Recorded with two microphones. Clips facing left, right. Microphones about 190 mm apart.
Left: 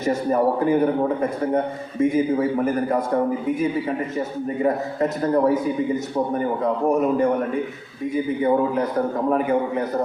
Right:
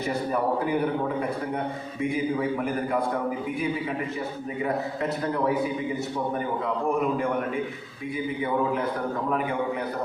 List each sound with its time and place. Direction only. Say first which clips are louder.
0.0 s a man's voice: left 6 dB; 45° left (ahead or behind)
4.6 s a man's voice: left 6 dB; 45° left (ahead or behind)
6.8 s a man's voice: left 7 dB; 40° left (ahead or behind)